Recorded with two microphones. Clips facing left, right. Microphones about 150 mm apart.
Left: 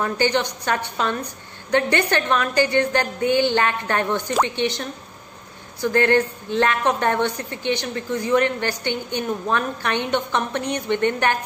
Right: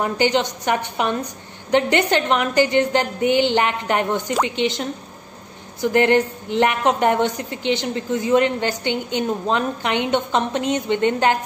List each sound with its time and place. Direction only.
0.0 s a woman's voice: 20° right (ahead or behind)